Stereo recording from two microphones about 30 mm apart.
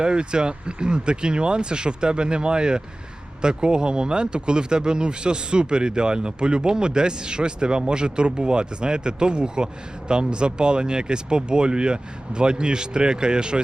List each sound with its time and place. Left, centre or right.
0.0 s speech: right